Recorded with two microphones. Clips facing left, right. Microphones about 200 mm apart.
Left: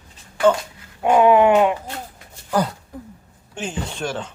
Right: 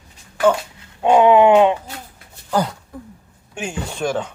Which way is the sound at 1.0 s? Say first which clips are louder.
Right 2 dB; 25° right (ahead or behind).